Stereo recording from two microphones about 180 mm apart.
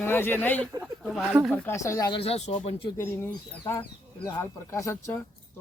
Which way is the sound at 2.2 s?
35° left (ahead or behind).